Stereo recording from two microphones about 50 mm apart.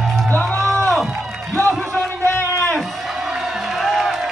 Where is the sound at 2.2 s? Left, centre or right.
Left.